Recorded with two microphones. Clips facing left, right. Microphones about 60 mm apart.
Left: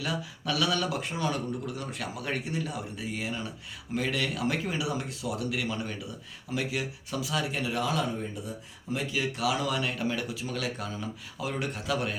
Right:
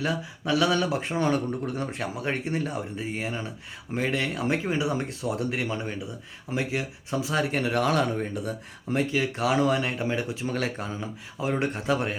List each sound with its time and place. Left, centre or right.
0.0 s speech: right
9.0 s speech: right